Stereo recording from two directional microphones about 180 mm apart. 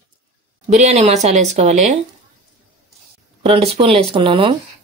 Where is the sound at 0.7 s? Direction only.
40° right (ahead or behind).